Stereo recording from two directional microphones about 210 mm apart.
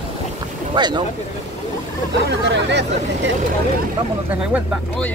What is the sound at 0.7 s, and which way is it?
Speech, 20° right (ahead or behind).